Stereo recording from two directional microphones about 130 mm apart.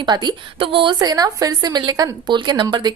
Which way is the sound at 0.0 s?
35° right (ahead or behind).